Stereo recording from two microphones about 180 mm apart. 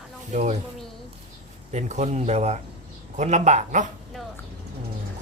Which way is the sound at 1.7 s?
40° right (ahead or behind).